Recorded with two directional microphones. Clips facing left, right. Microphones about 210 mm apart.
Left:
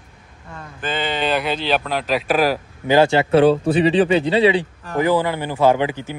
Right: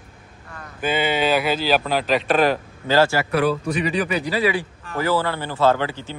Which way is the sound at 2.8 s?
15° left (ahead or behind).